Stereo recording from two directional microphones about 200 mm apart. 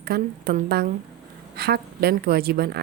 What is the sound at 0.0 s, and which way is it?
Speech, 50° right (ahead or behind).